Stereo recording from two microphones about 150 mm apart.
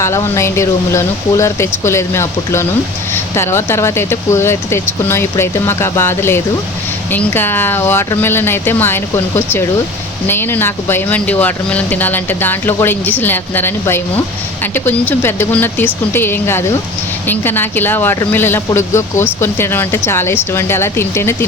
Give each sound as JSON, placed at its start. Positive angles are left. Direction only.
{"t": 0.0, "sound": "speech", "side_deg": 20}